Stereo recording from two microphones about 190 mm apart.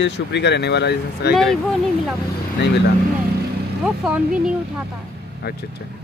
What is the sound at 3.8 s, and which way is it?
Speech, 5° right (ahead or behind).